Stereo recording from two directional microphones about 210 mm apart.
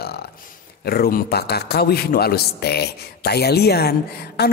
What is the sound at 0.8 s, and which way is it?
A woman's voice, 45° left (ahead or behind).